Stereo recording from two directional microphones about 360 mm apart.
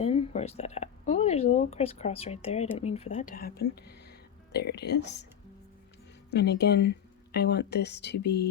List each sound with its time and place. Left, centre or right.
0.0 s speech: centre
6.3 s speech: left